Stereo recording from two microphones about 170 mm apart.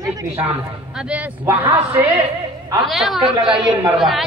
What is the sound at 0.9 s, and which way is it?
A man's voice, 10° right (ahead or behind).